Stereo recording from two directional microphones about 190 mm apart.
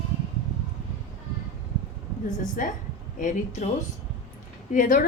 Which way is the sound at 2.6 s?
45° left (ahead or behind).